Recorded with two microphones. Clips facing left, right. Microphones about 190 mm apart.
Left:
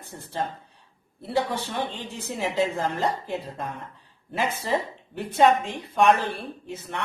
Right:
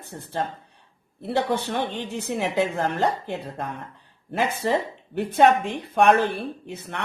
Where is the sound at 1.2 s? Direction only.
60° right (ahead or behind).